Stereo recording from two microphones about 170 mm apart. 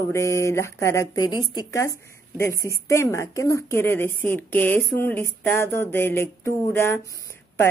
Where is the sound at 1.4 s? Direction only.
25° left (ahead or behind).